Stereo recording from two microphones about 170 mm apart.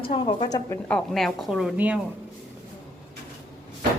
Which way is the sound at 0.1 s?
35° left (ahead or behind).